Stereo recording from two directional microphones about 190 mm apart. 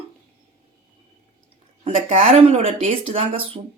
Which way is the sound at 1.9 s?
35° right (ahead or behind).